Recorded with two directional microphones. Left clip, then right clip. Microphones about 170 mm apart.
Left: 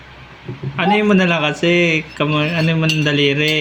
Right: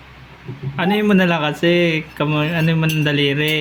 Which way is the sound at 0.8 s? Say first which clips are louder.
Left 2 dB; 25° right (ahead or behind).